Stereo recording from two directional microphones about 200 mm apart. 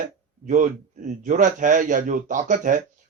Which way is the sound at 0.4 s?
40° right (ahead or behind).